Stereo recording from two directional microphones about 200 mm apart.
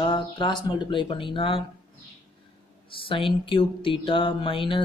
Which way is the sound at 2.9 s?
25° left (ahead or behind).